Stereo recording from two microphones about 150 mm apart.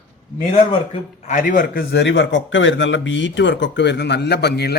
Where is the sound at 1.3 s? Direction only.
60° left (ahead or behind).